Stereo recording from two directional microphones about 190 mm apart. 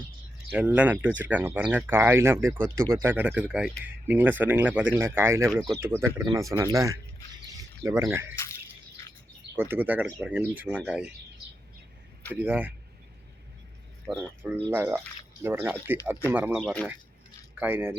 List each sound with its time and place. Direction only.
0.5 s speech: 5° right (ahead or behind)
7.5 s a sound: 15° right (ahead or behind)
9.6 s speech: 10° right (ahead or behind)
12.3 s speech: 10° right (ahead or behind)
14.1 s speech: 10° right (ahead or behind)
16.6 s speech: centre (ahead or behind)
17.6 s speech: 10° right (ahead or behind)